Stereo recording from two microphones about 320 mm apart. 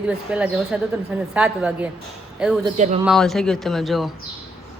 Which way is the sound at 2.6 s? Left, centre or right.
Right.